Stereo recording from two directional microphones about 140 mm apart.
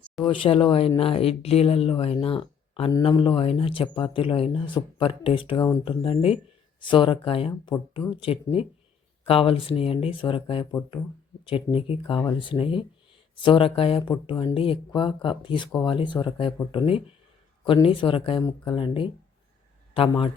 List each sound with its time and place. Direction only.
0.3 s speech: 40° left (ahead or behind)
5.5 s speech: 25° left (ahead or behind)
5.8 s speech: 40° left (ahead or behind)